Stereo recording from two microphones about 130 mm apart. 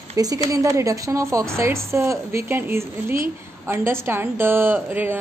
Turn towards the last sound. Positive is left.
turn(degrees=-15)  # may be behind; listen again after turning